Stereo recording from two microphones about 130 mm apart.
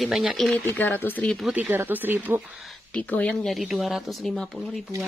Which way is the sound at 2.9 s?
10° left (ahead or behind).